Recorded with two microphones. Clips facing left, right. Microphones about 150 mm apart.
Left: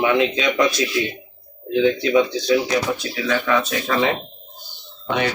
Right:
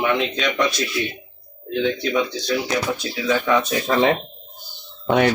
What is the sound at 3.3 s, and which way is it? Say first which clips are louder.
Speech: right 1 dB; 20° right (ahead or behind).